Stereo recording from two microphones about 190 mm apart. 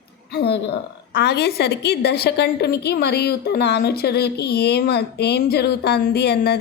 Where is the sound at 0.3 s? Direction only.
60° left (ahead or behind).